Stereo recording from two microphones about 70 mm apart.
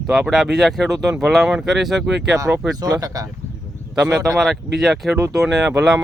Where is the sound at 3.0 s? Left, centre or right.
Right.